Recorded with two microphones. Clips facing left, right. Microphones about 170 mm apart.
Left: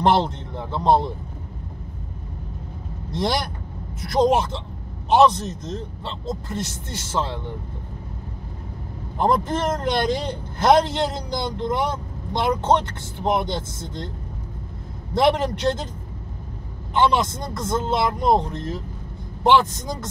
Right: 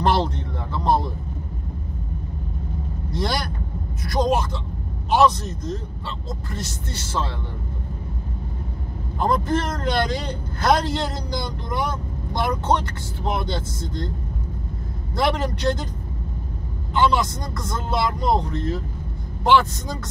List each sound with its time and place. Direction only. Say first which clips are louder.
0.0 s a man's voice: left 2 dB; 20° left (ahead or behind)
3.1 s a man's voice: left 2 dB; 20° left (ahead or behind)
9.2 s a man's voice: left 1 dB; 20° left (ahead or behind)
15.1 s a man's voice: left 4 dB; 20° left (ahead or behind)
16.9 s a man's voice: left 1 dB; 20° left (ahead or behind)